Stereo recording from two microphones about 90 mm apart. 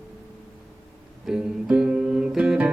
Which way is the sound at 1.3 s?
10° right (ahead or behind).